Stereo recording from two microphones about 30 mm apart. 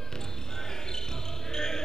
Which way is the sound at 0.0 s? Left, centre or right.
Centre.